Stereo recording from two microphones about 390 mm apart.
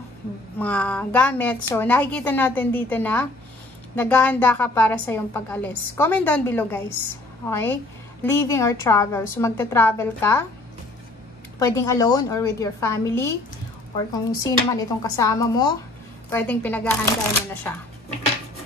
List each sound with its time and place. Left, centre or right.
0.6 s a woman's voice: centre
11.6 s a woman's voice: centre